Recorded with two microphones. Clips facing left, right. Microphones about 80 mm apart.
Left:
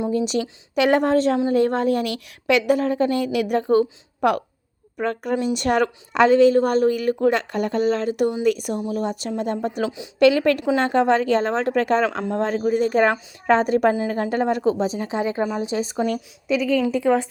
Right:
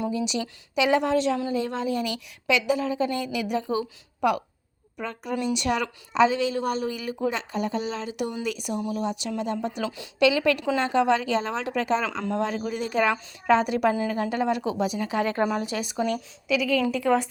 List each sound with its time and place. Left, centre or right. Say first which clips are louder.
0.1 s a woman's voice: left 6 dB; left
9.8 s speech: left 5 dB; centre
10.2 s a woman's voice: left 5 dB; left
15.2 s speech: left 1 dB; centre